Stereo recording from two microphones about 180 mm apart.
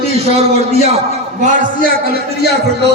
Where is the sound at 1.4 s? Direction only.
45° right (ahead or behind).